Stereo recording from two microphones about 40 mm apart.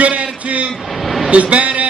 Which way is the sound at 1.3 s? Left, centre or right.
Right.